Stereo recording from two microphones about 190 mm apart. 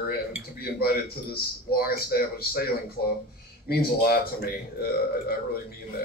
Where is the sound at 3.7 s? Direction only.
55° left (ahead or behind).